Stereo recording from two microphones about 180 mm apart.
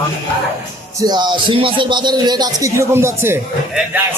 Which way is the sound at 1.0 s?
25° right (ahead or behind).